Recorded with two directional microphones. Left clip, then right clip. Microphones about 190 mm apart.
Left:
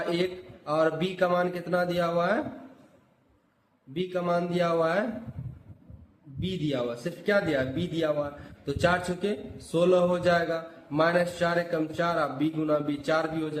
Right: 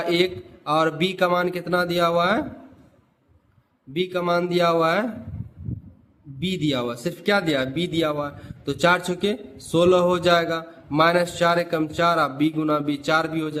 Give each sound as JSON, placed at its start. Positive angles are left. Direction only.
{"t": 0.0, "sound": "a man's voice", "side_deg": -45}
{"t": 3.9, "sound": "a man's voice", "side_deg": -45}
{"t": 6.4, "sound": "a man's voice", "side_deg": -45}